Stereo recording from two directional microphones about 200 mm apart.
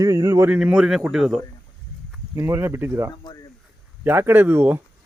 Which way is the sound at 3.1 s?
20° left (ahead or behind).